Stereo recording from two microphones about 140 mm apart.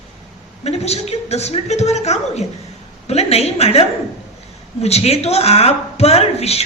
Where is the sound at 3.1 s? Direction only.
45° left (ahead or behind).